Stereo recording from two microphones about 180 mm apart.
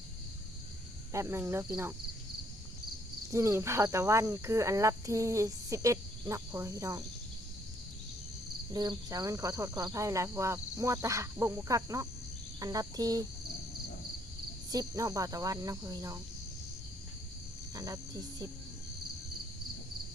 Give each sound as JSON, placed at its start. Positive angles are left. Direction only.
{"t": 1.1, "sound": "speech", "side_deg": -15}
{"t": 3.3, "sound": "speech", "side_deg": -15}
{"t": 8.7, "sound": "speech", "side_deg": -20}
{"t": 14.7, "sound": "speech", "side_deg": -20}
{"t": 17.7, "sound": "speech", "side_deg": -20}